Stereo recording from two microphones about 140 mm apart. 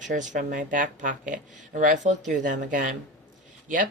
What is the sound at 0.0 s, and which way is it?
Speech, 60° right (ahead or behind).